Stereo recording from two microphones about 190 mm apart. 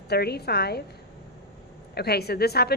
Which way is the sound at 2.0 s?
55° left (ahead or behind).